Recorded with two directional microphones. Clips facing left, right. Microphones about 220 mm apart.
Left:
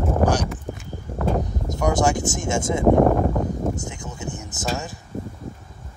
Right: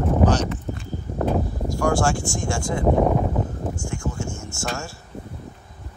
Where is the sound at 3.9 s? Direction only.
20° left (ahead or behind).